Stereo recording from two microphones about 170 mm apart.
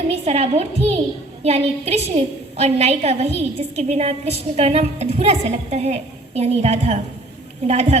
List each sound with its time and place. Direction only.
0.1 s a woman's voice: 40° right (ahead or behind)